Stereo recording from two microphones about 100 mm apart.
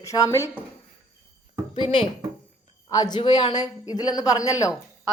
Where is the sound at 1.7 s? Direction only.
65° left (ahead or behind).